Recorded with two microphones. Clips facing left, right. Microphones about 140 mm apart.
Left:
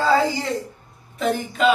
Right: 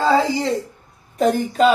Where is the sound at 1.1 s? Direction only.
40° right (ahead or behind).